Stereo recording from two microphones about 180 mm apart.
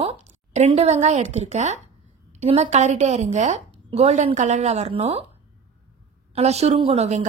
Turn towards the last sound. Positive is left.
turn(degrees=-40)  # may be behind; listen again after turning